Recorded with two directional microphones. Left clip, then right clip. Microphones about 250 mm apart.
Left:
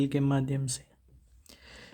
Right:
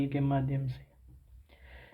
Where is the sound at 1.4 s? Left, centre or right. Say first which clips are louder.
Left 5 dB; left.